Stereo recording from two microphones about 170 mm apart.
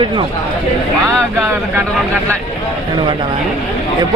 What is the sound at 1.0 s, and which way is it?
Speech, 15° right (ahead or behind).